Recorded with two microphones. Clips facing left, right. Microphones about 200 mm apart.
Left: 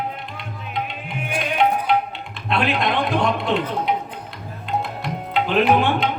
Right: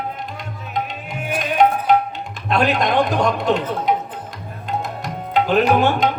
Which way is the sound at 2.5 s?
45° right (ahead or behind).